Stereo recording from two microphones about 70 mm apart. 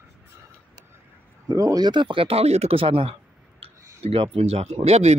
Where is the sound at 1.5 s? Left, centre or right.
Right.